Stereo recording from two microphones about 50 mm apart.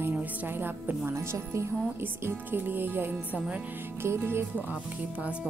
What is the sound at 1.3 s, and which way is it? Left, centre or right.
Speech, right.